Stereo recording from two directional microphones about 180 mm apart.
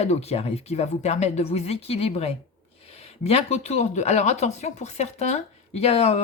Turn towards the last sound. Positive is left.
turn(degrees=35)  # may be behind; listen again after turning